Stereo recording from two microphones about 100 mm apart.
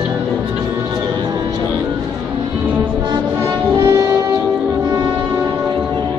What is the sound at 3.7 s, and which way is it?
Music, 45° right (ahead or behind).